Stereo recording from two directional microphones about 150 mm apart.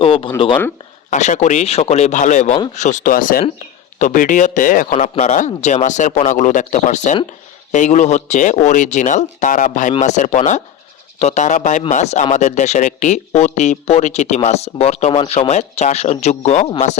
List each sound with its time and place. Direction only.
0.0 s speech: 35° left (ahead or behind)
1.1 s speech: 55° left (ahead or behind)
4.9 s speech: 50° left (ahead or behind)